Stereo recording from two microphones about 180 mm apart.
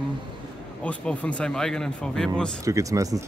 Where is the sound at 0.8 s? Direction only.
5° left (ahead or behind).